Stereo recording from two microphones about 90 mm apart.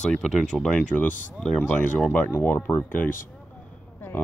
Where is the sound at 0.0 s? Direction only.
5° left (ahead or behind).